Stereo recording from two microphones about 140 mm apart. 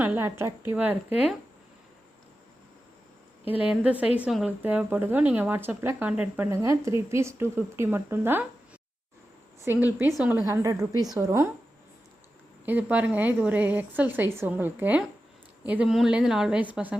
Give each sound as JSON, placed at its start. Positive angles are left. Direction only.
{"t": 0.0, "sound": "a woman's voice", "side_deg": -15}
{"t": 3.5, "sound": "a woman's voice", "side_deg": -10}
{"t": 6.5, "sound": "a woman's voice", "side_deg": -20}
{"t": 9.6, "sound": "a woman's voice", "side_deg": -15}
{"t": 10.4, "sound": "a woman's voice", "side_deg": -25}
{"t": 12.6, "sound": "a woman's voice", "side_deg": -10}